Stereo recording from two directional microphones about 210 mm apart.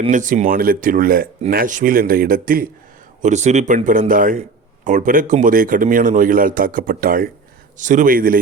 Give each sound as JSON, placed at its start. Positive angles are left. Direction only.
{"t": 0.1, "sound": "speech", "side_deg": -40}